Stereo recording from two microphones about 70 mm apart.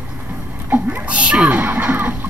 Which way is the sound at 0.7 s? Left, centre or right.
Right.